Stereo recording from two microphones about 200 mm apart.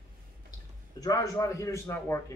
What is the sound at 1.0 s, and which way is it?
A man's voice, 15° left (ahead or behind).